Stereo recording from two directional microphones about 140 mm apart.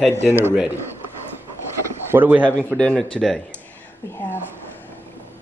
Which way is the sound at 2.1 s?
15° right (ahead or behind).